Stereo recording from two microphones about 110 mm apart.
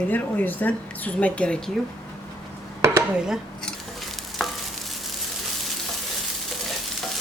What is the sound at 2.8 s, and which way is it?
Chopping, 25° right (ahead or behind).